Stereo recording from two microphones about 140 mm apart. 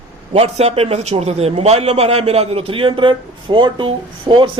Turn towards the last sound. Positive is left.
turn(degrees=-35)  # may be behind; listen again after turning